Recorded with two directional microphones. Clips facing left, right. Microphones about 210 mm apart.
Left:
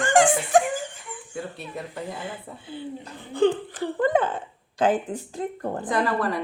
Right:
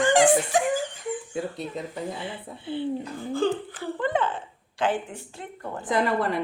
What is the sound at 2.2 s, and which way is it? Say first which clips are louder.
Speech: right 1 dB; 45° left (ahead or behind).